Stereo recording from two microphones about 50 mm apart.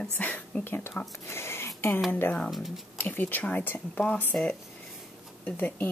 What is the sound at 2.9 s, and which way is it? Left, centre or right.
Speech, left.